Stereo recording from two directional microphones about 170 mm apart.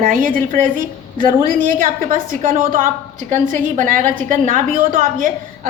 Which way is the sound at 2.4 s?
50° right (ahead or behind).